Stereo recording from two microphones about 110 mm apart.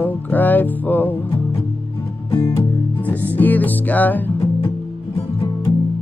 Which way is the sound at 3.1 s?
15° left (ahead or behind).